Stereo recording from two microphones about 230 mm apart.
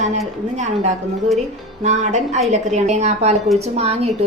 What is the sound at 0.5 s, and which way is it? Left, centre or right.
A woman's voice, right.